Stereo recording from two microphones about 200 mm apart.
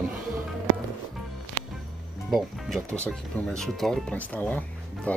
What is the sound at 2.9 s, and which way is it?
Speech, 15° right (ahead or behind).